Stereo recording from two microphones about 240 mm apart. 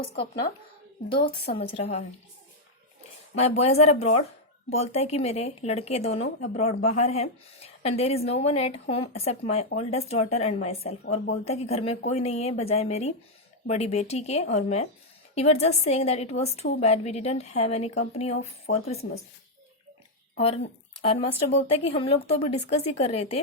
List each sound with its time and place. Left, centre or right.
1.1 s speech: left
3.3 s speech: left
20.3 s speech: left